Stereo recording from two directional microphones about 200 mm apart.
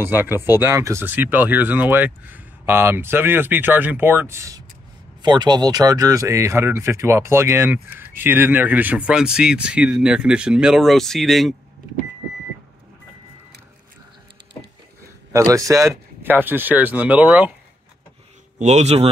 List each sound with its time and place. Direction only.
0.0 s speech: 10° right (ahead or behind)
15.3 s speech: 15° right (ahead or behind)
18.6 s speech: 35° right (ahead or behind)